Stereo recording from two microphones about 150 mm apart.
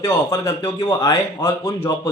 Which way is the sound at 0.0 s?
20° left (ahead or behind).